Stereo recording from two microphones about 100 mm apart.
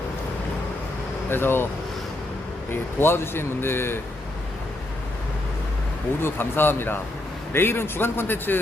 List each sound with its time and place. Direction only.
1.3 s a man's voice: 20° left (ahead or behind)
2.6 s a man's voice: 25° left (ahead or behind)
6.2 s a man's voice: 20° left (ahead or behind)